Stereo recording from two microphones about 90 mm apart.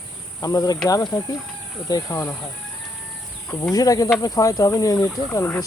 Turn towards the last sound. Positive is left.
turn(degrees=30)  # may be behind; listen again after turning